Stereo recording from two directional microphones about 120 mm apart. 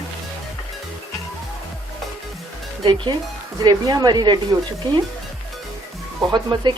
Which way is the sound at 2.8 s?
40° right (ahead or behind).